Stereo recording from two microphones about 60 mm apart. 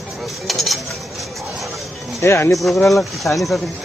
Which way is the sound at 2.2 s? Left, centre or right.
Left.